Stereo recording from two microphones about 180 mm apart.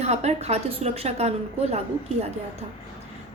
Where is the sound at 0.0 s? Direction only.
40° right (ahead or behind).